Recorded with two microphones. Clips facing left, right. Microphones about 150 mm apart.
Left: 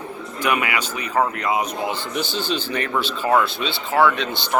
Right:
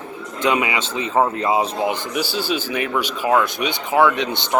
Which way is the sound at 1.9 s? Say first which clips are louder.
Right 2 dB; 10° right (ahead or behind).